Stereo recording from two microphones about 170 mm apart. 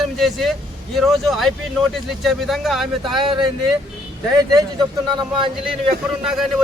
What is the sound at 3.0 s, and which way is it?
Speech, 25° right (ahead or behind).